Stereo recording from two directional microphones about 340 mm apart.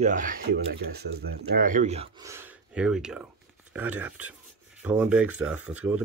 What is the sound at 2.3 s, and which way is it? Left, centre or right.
Speech, centre.